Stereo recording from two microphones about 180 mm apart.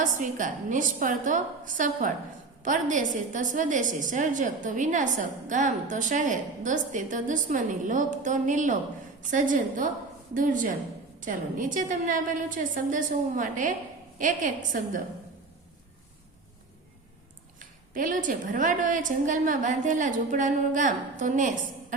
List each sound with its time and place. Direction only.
0.0 s a woman's voice: 45° right (ahead or behind)
17.9 s a woman's voice: 45° right (ahead or behind)